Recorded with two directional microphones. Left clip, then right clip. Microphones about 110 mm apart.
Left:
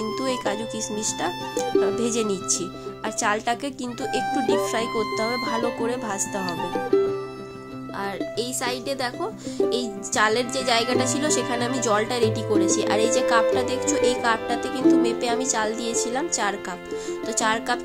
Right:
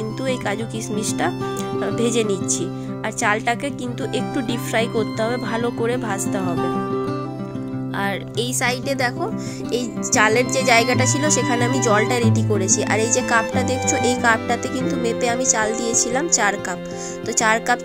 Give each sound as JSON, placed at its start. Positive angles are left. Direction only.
{"t": 0.9, "sound": "speech", "side_deg": -45}
{"t": 6.5, "sound": "speech", "side_deg": 0}
{"t": 8.0, "sound": "speech", "side_deg": -80}
{"t": 9.8, "sound": "speech", "side_deg": -65}
{"t": 11.1, "sound": "speech", "side_deg": -50}
{"t": 14.0, "sound": "speech", "side_deg": -60}
{"t": 15.0, "sound": "speech", "side_deg": -45}